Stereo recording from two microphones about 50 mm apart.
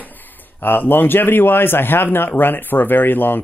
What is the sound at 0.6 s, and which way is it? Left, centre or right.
Speech, left.